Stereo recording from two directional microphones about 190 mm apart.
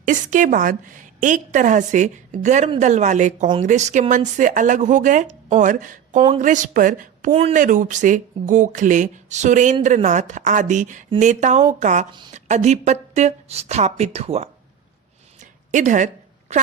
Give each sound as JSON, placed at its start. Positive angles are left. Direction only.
{"t": 0.0, "sound": "a woman's voice", "side_deg": -45}
{"t": 7.3, "sound": "a woman's voice", "side_deg": -30}
{"t": 7.5, "sound": "a woman's voice", "side_deg": -45}
{"t": 15.4, "sound": "a sound", "side_deg": -40}